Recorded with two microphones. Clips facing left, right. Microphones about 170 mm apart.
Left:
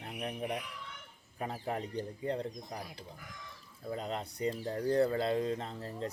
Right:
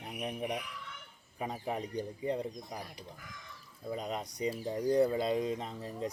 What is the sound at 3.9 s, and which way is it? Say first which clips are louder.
Speech: even; 15° right (ahead or behind).